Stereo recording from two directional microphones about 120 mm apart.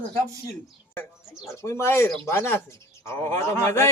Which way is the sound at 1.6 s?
25° left (ahead or behind).